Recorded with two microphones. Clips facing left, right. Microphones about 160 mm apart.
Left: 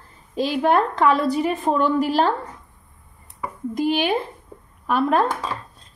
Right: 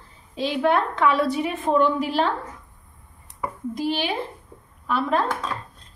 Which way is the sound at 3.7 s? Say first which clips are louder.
Left 5 dB; 50° left (ahead or behind).